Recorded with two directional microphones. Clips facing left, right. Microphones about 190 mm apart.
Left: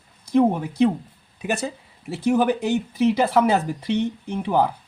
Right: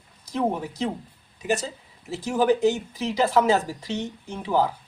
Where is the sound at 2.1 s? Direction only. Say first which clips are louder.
Left 2 dB; 60° left (ahead or behind).